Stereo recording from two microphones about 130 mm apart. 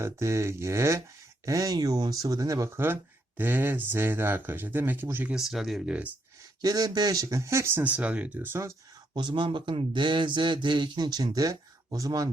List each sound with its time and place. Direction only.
0.0 s speech: 20° right (ahead or behind)
5.3 s speech: 5° right (ahead or behind)
6.6 s speech: 30° right (ahead or behind)
9.1 s a man's voice: 35° right (ahead or behind)